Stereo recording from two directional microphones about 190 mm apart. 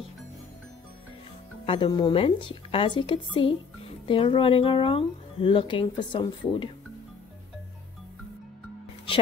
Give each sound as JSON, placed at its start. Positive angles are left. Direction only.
{"t": 1.7, "sound": "a woman's voice", "side_deg": 25}